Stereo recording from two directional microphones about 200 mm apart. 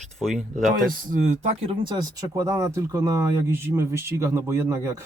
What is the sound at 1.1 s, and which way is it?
Speech, 35° right (ahead or behind).